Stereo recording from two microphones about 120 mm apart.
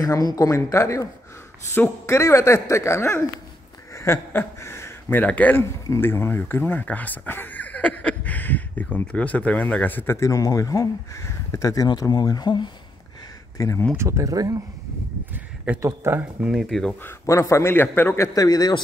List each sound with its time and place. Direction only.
0.0 s a man's voice: 30° left (ahead or behind)
13.6 s a man's voice: 25° left (ahead or behind)
13.9 s speech: 25° right (ahead or behind)
15.8 s speech: 20° right (ahead or behind)
16.4 s speech: centre (ahead or behind)
17.0 s a man's voice: 25° left (ahead or behind)